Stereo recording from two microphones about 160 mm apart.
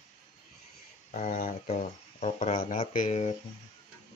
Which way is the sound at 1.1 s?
60° left (ahead or behind).